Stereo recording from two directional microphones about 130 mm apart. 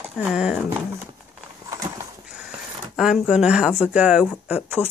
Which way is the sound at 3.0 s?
5° right (ahead or behind).